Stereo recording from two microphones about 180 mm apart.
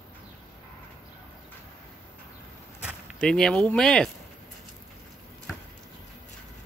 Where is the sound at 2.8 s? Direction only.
5° right (ahead or behind).